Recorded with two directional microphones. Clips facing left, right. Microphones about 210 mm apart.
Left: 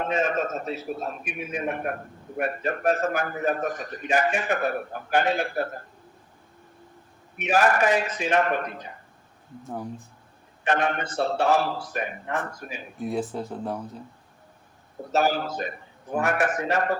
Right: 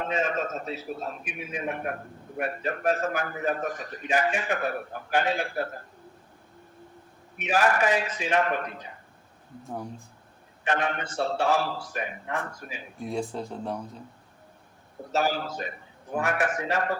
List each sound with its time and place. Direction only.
0.0 s a man's voice: 50° left (ahead or behind)
7.4 s a man's voice: 45° left (ahead or behind)
10.7 s a man's voice: 50° left (ahead or behind)
11.2 s a man's voice: 60° left (ahead or behind)
11.9 s a man's voice: 45° left (ahead or behind)
13.0 s speech: 5° left (ahead or behind)
15.1 s a man's voice: 55° left (ahead or behind)